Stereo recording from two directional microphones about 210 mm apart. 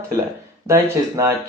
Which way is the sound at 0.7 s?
15° right (ahead or behind).